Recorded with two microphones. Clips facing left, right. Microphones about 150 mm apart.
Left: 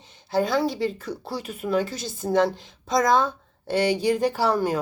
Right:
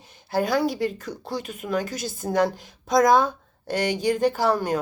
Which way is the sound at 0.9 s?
5° left (ahead or behind).